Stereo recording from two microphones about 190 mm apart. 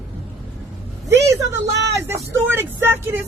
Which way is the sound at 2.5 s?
10° right (ahead or behind).